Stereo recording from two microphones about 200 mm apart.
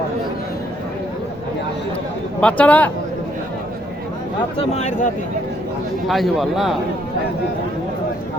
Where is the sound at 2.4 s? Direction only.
5° left (ahead or behind).